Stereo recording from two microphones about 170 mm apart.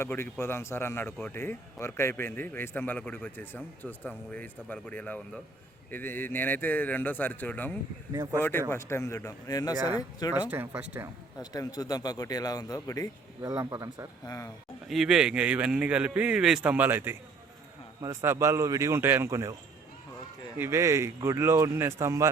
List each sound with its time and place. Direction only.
0.0 s speech: 15° left (ahead or behind)
8.1 s speech: 20° right (ahead or behind)
8.4 s speech: 10° left (ahead or behind)
10.5 s a man's voice: 10° right (ahead or behind)
11.3 s speech: 20° left (ahead or behind)
13.4 s speech: 20° right (ahead or behind)
14.3 s speech: 20° left (ahead or behind)
14.8 s a man's voice: centre (ahead or behind)
20.6 s a man's voice: 15° right (ahead or behind)